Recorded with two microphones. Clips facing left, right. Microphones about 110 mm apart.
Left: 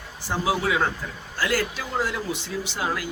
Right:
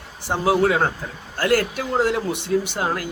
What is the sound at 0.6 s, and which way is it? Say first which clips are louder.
Speech: right 5 dB; 50° right (ahead or behind).